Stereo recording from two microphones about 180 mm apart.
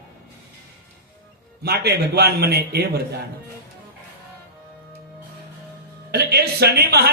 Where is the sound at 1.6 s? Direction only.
60° right (ahead or behind).